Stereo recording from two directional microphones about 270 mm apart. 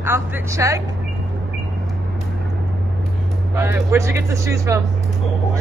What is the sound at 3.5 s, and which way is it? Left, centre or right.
Speech, centre.